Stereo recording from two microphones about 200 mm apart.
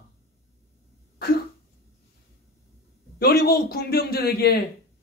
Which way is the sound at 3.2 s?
50° left (ahead or behind).